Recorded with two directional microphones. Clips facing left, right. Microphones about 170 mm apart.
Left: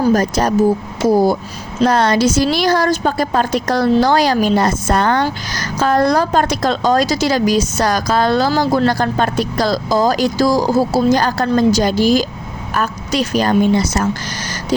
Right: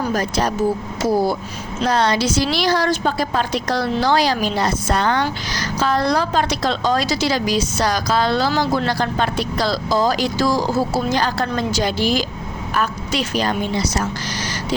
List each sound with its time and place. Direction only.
0.0 s a woman's voice: 45° left (ahead or behind)